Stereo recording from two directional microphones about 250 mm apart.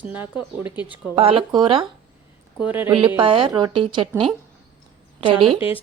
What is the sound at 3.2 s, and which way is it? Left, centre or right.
A woman's voice, centre.